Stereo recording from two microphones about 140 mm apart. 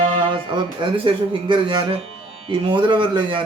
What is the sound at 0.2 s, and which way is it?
Speech, 35° right (ahead or behind).